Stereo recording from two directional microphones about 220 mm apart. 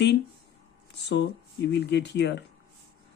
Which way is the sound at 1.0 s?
50° left (ahead or behind).